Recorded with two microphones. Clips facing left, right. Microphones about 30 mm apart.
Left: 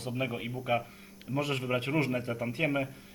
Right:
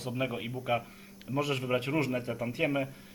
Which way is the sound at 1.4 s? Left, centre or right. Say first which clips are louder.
Right 1 dB; left.